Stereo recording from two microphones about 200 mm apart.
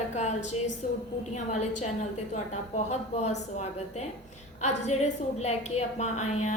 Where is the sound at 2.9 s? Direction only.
35° left (ahead or behind).